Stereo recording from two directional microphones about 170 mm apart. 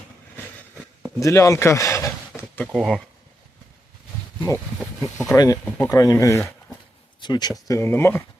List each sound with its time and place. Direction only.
1.2 s a sound: 20° left (ahead or behind)
2.7 s speech: centre (ahead or behind)
4.4 s speech: 15° left (ahead or behind)
5.6 s speech: 10° left (ahead or behind)
5.9 s speech: 20° left (ahead or behind)